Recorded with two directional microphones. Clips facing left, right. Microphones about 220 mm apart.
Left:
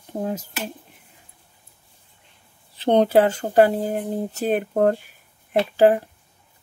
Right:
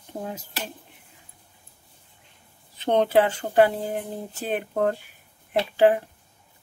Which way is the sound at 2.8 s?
35° left (ahead or behind).